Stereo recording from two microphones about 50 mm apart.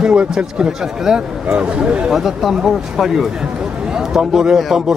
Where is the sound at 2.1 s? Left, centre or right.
Centre.